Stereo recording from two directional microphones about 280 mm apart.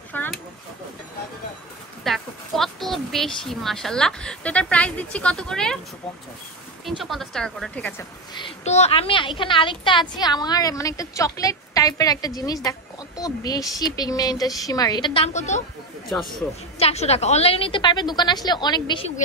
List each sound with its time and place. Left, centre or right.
0.1 s a sound: centre
2.0 s speech: centre
7.0 s speech: centre
8.4 s a woman's voice: left
16.1 s speech: centre
16.7 s a woman's voice: left